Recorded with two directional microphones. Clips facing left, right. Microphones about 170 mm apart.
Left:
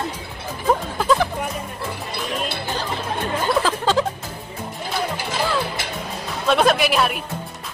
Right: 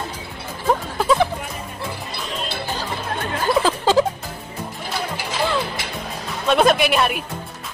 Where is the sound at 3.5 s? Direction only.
Centre (ahead or behind).